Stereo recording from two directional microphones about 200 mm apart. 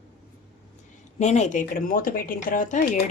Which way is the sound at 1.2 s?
35° left (ahead or behind).